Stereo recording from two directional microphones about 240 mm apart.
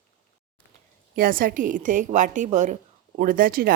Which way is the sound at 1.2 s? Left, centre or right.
Right.